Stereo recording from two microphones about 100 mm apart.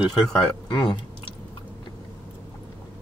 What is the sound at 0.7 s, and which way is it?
Speech, 45° left (ahead or behind).